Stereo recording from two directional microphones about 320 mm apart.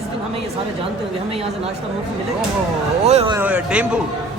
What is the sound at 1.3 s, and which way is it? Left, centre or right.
Speech, centre.